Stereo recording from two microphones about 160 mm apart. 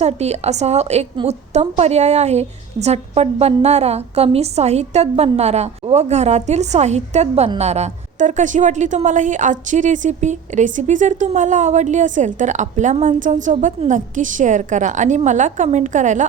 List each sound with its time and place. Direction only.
0.0 s a woman's voice: 40° right (ahead or behind)